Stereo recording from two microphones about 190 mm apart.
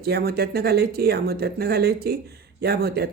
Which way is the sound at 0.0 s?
55° right (ahead or behind).